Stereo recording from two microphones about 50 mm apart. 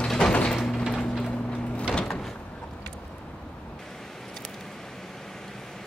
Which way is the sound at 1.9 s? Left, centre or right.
Centre.